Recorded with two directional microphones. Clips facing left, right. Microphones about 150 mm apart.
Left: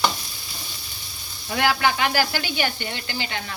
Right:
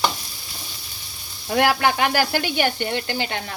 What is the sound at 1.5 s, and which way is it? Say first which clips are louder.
Speech: right 3 dB; 55° right (ahead or behind).